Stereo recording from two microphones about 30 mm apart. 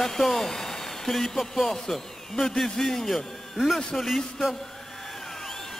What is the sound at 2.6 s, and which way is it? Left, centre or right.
Speech, centre.